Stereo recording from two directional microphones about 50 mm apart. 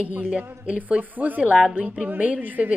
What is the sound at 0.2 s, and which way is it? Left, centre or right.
Speech, right.